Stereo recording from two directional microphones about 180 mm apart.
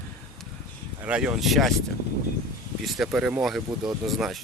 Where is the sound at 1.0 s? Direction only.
5° right (ahead or behind).